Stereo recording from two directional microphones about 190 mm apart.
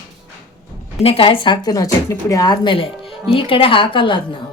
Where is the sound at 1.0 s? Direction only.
30° left (ahead or behind).